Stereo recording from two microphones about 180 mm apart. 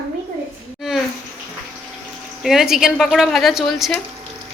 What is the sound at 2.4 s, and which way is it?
A child's voice, centre (ahead or behind).